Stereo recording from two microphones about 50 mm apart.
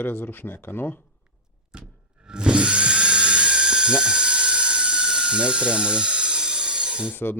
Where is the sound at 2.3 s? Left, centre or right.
Centre.